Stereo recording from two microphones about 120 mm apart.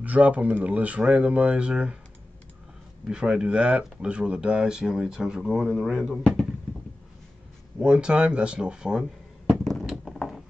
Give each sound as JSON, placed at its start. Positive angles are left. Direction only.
{"t": 0.0, "sound": "speech", "side_deg": -10}
{"t": 3.1, "sound": "speech", "side_deg": -5}
{"t": 7.8, "sound": "a sound", "side_deg": -10}